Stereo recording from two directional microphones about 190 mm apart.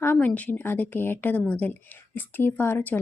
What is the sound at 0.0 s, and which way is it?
A woman's voice, 10° left (ahead or behind).